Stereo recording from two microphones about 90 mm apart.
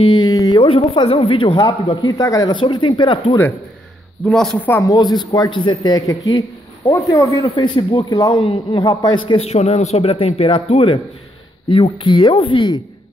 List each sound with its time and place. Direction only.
0.0 s speech: 60° left (ahead or behind)
0.3 s a sound: 45° left (ahead or behind)
0.6 s speech: 80° left
1.7 s a man's voice: 55° left (ahead or behind); by 2.5 s 40° left (ahead or behind)
2.5 s speech: 65° left (ahead or behind)
4.3 s speech: 5° left (ahead or behind)
4.6 s speech: 25° left (ahead or behind)
4.8 s a man's voice: 45° left (ahead or behind); by 5.8 s 60° left (ahead or behind)
5.8 s a man's voice: 45° left (ahead or behind)
7.4 s speech: 65° left (ahead or behind)
8.1 s a man's voice: 45° left (ahead or behind)
8.4 s speech: 75° left (ahead or behind)
8.8 s speech: 60° left (ahead or behind)
10.0 s speech: 90° left; by 12.7 s 70° left (ahead or behind)